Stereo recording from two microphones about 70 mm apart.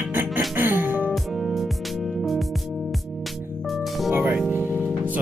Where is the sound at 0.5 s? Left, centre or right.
Right.